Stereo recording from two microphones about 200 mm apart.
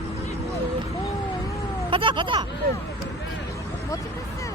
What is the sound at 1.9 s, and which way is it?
Speech, 25° right (ahead or behind).